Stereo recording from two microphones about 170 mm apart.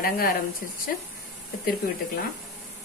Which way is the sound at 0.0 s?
60° left (ahead or behind).